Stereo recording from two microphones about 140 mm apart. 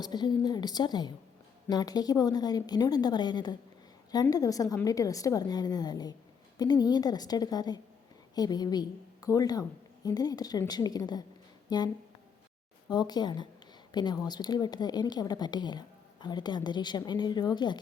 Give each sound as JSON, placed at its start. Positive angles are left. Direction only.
{"t": 0.0, "sound": "a woman's voice", "side_deg": 30}
{"t": 12.9, "sound": "speech", "side_deg": 30}